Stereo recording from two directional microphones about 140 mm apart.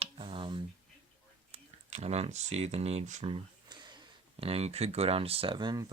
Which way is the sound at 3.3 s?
30° right (ahead or behind).